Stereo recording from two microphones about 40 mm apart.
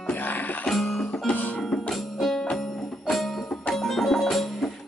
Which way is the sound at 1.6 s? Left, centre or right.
Centre.